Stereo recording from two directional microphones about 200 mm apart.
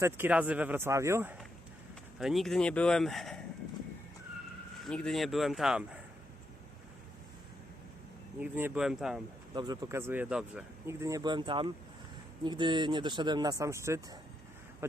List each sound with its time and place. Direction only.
0.0 s speech: 10° right (ahead or behind)
4.9 s speech: 5° left (ahead or behind)
8.4 s speech: 10° right (ahead or behind)
9.6 s speech: 20° right (ahead or behind)